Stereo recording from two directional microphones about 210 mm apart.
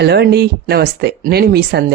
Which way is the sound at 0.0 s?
50° right (ahead or behind).